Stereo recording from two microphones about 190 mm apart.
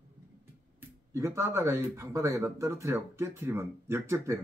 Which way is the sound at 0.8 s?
15° right (ahead or behind).